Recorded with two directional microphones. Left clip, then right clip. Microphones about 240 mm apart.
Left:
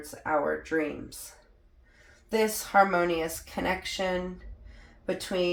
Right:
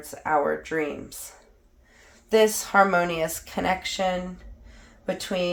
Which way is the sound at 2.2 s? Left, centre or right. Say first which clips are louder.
Right 7 dB; right.